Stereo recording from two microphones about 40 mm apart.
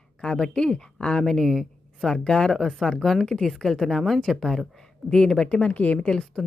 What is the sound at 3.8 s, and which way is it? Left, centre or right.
Speech, centre.